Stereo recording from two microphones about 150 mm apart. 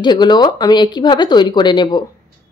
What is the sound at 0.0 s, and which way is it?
A woman's voice, 30° left (ahead or behind).